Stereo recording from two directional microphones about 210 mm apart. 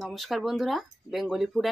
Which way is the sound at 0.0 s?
Centre (ahead or behind).